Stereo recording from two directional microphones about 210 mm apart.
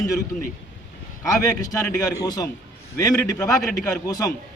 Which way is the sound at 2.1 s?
20° left (ahead or behind).